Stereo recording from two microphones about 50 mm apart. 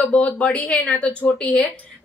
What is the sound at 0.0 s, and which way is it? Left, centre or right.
Speech, left.